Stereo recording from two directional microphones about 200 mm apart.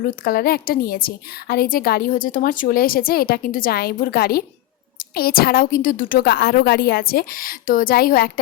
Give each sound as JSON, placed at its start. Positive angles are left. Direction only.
{"t": 0.3, "sound": "a woman's voice", "side_deg": 50}